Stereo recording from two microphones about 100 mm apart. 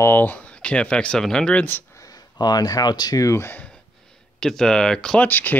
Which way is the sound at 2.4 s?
40° left (ahead or behind).